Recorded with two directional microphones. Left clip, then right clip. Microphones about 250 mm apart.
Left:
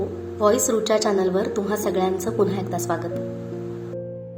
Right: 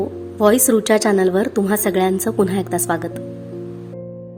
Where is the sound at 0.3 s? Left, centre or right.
Right.